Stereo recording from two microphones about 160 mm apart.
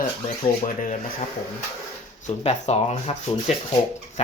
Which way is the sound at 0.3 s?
55° left (ahead or behind).